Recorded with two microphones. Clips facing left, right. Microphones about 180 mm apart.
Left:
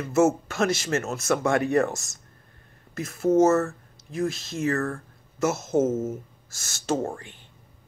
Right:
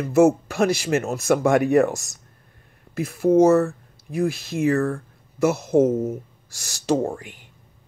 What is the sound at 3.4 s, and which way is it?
Speech, 15° right (ahead or behind).